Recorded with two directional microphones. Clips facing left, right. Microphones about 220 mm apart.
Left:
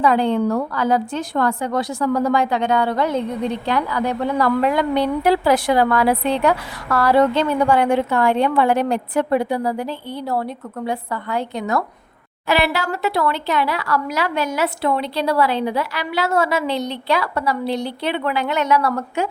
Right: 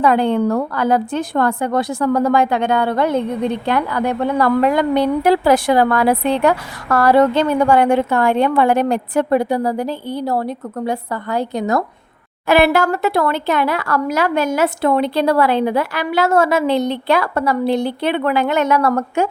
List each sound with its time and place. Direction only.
0.0 s a woman's voice: 55° right (ahead or behind); by 11.8 s 40° right (ahead or behind)
12.5 s speech: 50° right (ahead or behind)